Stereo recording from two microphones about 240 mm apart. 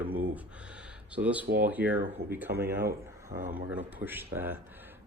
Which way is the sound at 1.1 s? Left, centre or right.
Centre.